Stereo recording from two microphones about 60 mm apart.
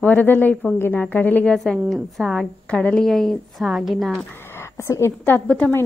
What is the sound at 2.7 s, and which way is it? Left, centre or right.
Speech, centre.